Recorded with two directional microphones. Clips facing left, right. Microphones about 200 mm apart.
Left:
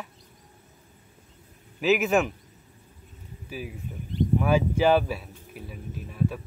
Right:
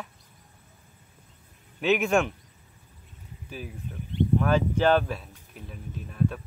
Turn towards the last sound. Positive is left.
turn(degrees=5)  # may be behind; listen again after turning